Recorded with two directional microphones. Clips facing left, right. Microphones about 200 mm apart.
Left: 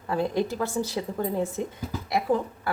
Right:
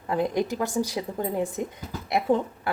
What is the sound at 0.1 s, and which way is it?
Speech, 15° right (ahead or behind).